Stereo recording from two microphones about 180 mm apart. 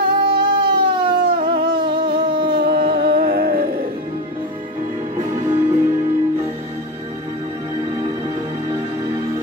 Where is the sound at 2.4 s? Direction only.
65° right (ahead or behind).